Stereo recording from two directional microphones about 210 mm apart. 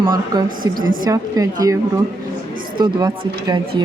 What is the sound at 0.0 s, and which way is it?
Speech, 20° right (ahead or behind).